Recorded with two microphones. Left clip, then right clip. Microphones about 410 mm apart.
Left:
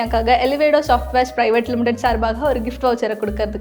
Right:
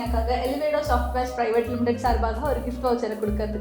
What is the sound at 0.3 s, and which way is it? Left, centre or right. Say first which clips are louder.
Speech: left 10 dB; left.